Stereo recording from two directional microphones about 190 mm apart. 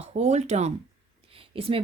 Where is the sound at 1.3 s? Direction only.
30° right (ahead or behind).